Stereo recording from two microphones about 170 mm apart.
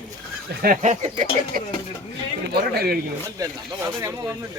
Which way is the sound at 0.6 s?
50° right (ahead or behind).